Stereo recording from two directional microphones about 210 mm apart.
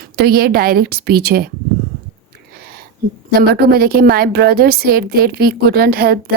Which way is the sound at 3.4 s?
50° right (ahead or behind).